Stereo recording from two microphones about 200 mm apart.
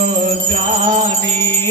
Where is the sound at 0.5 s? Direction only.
30° right (ahead or behind).